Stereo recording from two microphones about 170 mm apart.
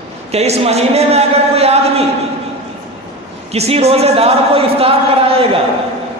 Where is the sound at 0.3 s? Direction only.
40° right (ahead or behind).